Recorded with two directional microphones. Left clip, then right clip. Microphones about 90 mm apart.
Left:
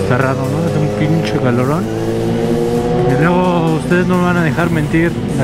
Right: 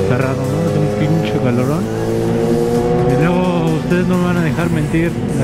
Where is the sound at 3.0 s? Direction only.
35° left (ahead or behind).